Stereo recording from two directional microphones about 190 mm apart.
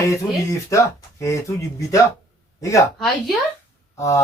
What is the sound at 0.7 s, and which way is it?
Speech, 15° left (ahead or behind).